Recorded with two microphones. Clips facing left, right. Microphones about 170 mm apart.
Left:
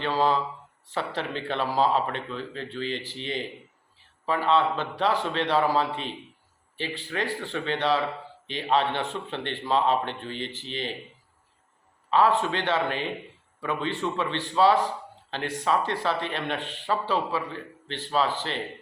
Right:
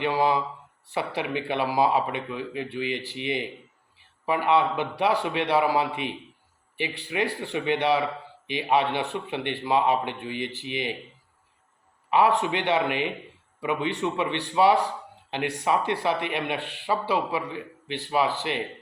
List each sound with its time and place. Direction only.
0.0 s a man's voice: 15° right (ahead or behind)
12.1 s a man's voice: 15° right (ahead or behind)